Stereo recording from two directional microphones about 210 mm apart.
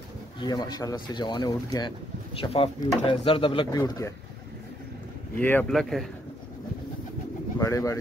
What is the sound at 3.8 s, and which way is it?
Speech, 15° left (ahead or behind).